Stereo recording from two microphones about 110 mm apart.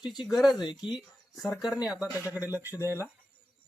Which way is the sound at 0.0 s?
40° left (ahead or behind).